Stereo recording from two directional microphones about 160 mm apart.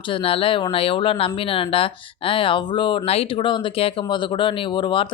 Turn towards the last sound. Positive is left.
turn(degrees=30)  # may be behind; listen again after turning